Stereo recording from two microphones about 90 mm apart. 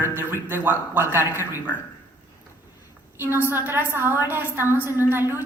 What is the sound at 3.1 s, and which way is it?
Speech, 25° right (ahead or behind).